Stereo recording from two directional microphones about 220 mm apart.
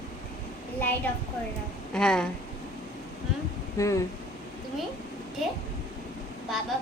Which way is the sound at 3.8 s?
15° left (ahead or behind).